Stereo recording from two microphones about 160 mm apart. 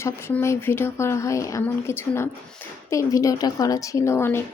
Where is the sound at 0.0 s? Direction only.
15° left (ahead or behind).